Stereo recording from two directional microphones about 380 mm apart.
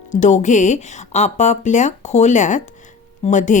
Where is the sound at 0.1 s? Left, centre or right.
Centre.